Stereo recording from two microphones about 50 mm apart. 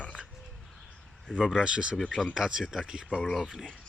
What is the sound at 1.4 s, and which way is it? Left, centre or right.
Speech, centre.